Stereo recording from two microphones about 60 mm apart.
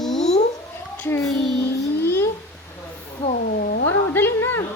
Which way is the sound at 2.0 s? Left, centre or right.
Left.